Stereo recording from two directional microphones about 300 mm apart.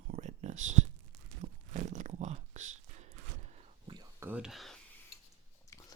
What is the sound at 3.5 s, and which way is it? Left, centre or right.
Whispering, centre.